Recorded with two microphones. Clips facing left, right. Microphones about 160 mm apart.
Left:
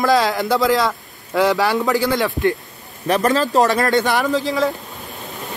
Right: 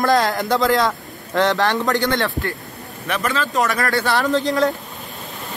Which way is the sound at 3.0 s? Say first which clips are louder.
Left 6 dB; 35° left (ahead or behind).